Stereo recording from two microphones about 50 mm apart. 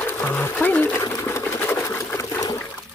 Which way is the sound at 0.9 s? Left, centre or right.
Left.